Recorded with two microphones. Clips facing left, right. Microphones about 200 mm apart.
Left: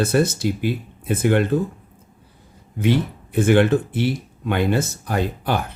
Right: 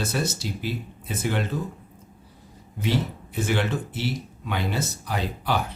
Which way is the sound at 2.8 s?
55° left (ahead or behind).